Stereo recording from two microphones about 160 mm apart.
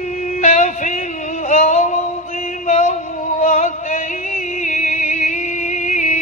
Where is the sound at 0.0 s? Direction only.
50° left (ahead or behind).